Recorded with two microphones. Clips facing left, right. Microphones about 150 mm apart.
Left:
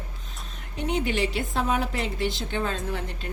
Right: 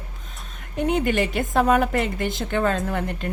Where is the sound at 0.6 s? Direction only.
50° right (ahead or behind).